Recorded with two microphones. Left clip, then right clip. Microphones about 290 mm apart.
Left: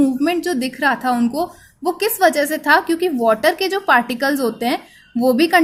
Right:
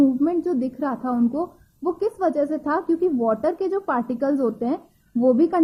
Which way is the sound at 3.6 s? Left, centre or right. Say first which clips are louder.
Left 8 dB; centre.